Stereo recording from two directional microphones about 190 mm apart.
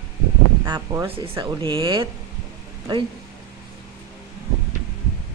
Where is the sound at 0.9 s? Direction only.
15° right (ahead or behind).